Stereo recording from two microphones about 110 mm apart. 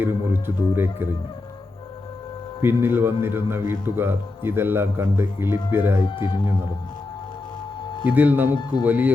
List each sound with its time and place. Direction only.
0.0 s speech: 20° right (ahead or behind)
2.6 s speech: 20° right (ahead or behind)
6.1 s speech: 45° left (ahead or behind)
8.0 s a man's voice: 15° right (ahead or behind)